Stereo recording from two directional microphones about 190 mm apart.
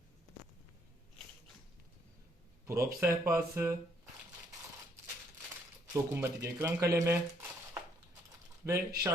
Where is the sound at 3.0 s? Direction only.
15° right (ahead or behind).